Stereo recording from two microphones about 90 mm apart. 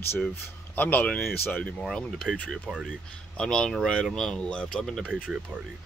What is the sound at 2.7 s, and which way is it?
Speech, 5° right (ahead or behind).